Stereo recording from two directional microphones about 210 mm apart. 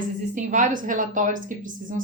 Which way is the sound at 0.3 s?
35° right (ahead or behind).